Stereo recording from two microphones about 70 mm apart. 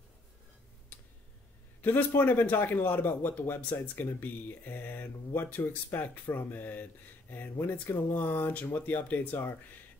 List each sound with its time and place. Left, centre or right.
1.8 s a man's voice: left